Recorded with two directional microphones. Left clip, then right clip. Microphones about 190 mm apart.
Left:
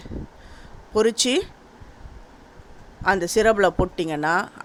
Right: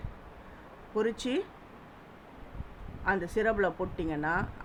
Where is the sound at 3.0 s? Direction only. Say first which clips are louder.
Left 10 dB; 50° left (ahead or behind).